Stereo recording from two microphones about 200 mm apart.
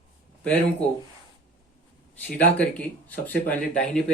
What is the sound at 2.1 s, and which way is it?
Speech, 5° left (ahead or behind).